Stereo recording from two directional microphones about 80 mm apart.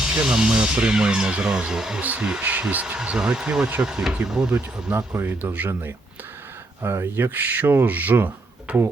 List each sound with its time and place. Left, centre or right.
0.1 s speech: centre
2.4 s speech: centre